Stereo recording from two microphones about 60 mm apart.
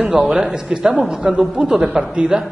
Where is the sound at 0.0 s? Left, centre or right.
Centre.